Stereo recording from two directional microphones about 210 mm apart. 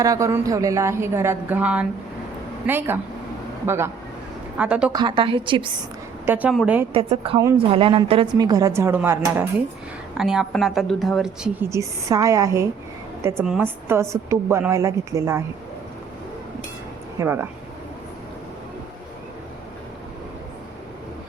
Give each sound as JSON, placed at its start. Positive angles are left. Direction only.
{"t": 0.0, "sound": "a woman's voice", "side_deg": -15}
{"t": 4.9, "sound": "a woman's voice", "side_deg": -20}
{"t": 6.2, "sound": "a woman's voice", "side_deg": -10}
{"t": 6.9, "sound": "a woman's voice", "side_deg": -25}
{"t": 11.7, "sound": "a woman's voice", "side_deg": -15}
{"t": 17.2, "sound": "a woman's voice", "side_deg": -10}